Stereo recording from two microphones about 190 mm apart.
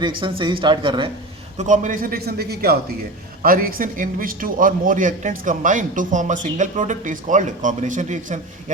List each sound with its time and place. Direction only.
0.2 s speech: 25° right (ahead or behind)
1.5 s a man's voice: 40° right (ahead or behind)